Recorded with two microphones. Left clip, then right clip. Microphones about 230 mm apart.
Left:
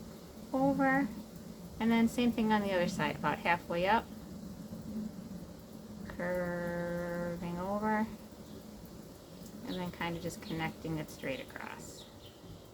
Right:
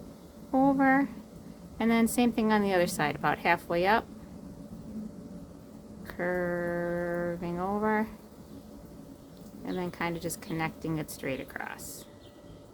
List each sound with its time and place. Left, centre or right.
0.8 s a woman's voice: right
6.1 s a sound: right
9.6 s a woman's voice: right